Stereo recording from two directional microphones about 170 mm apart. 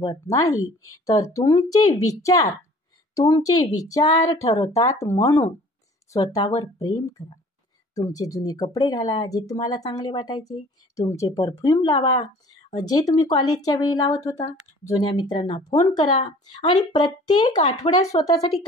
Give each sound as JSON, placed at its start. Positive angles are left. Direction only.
{"t": 0.0, "sound": "speech", "side_deg": 20}